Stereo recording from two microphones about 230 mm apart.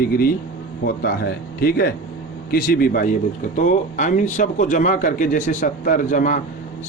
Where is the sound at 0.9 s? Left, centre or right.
Left.